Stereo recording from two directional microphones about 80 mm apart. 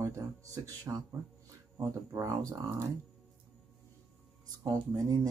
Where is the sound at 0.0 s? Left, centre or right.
Right.